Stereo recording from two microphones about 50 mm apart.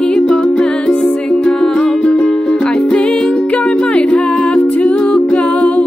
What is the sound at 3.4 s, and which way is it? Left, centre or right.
Music, left.